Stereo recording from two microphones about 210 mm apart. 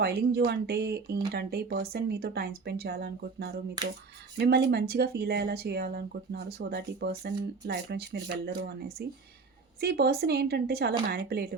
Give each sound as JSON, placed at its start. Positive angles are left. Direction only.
{"t": 0.0, "sound": "speech", "side_deg": -50}